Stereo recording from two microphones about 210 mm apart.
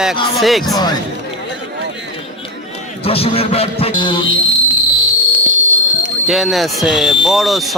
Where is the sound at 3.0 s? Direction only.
25° left (ahead or behind).